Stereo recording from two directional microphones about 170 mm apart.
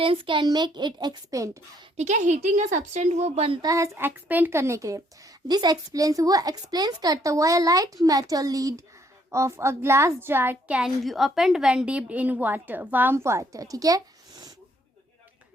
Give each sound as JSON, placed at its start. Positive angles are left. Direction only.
{"t": 0.0, "sound": "speech", "side_deg": -30}
{"t": 2.0, "sound": "a woman's voice", "side_deg": -45}
{"t": 3.6, "sound": "a woman's voice", "side_deg": -20}